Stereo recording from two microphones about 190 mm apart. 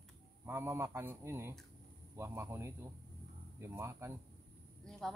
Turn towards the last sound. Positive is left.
turn(degrees=5)  # may be behind; listen again after turning